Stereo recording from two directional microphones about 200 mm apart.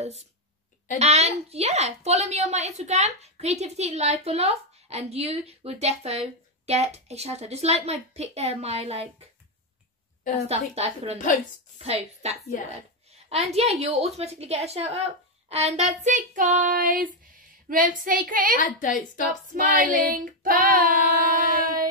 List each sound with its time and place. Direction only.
0.9 s a woman's voice: 30° right (ahead or behind)
10.7 s a woman's voice: 30° right (ahead or behind)
17.6 s child singing: 45° right (ahead or behind)
18.6 s a woman's voice: 40° left (ahead or behind)
19.5 s child singing: 45° right (ahead or behind)